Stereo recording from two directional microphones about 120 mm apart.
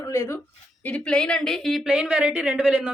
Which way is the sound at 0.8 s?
10° left (ahead or behind).